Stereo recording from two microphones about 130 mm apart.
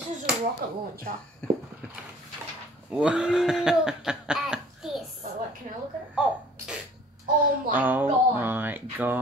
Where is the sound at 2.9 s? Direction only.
5° right (ahead or behind).